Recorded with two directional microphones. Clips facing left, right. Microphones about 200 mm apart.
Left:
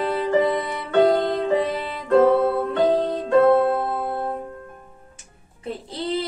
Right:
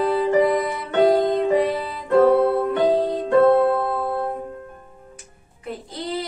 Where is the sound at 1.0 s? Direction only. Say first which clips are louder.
Right 2 dB; 20° right (ahead or behind).